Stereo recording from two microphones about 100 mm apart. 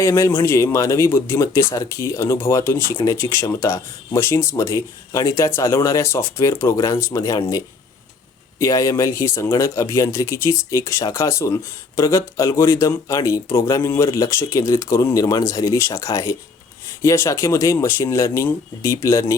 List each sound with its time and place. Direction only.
0.0 s speech: 30° left (ahead or behind)
8.5 s speech: 35° left (ahead or behind)